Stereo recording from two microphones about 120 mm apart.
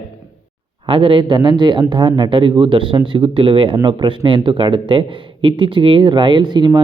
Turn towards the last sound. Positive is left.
turn(degrees=-35)  # may be behind; listen again after turning